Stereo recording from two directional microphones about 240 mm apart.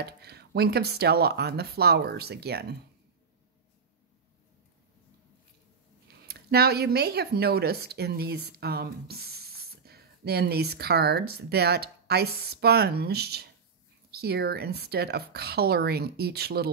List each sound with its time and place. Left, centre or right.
0.0 s speech: right
6.2 s speech: right